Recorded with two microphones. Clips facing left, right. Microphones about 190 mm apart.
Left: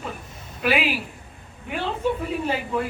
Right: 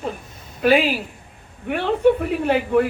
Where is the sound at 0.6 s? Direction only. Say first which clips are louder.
Right 7 dB; 45° right (ahead or behind).